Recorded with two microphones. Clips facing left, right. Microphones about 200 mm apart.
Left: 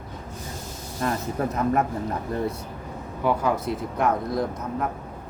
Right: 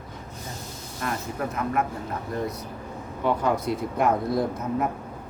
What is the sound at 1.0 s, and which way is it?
Speech, 30° left (ahead or behind).